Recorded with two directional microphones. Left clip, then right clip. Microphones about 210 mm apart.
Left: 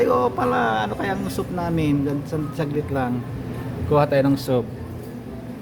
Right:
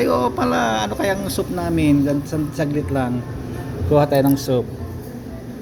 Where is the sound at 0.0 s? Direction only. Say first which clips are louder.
Right 1 dB; centre (ahead or behind).